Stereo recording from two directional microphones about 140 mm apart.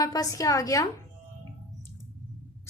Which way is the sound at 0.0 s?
25° left (ahead or behind).